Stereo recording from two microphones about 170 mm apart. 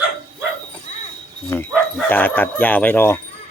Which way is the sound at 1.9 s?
10° left (ahead or behind).